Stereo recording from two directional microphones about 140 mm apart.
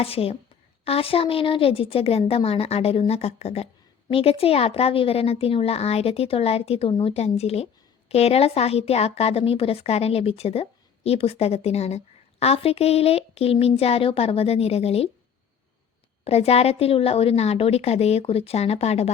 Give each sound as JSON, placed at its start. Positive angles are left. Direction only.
{"t": 0.0, "sound": "a woman's voice", "side_deg": 45}
{"t": 16.2, "sound": "a woman's voice", "side_deg": 45}